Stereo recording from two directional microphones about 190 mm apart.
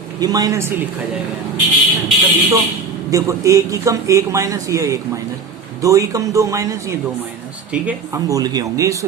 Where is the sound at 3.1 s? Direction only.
15° right (ahead or behind).